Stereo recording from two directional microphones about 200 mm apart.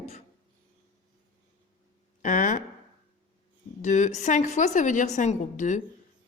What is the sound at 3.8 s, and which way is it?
A woman's voice, 35° left (ahead or behind).